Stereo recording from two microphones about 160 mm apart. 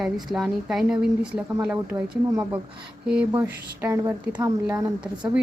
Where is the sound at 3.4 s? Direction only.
15° right (ahead or behind).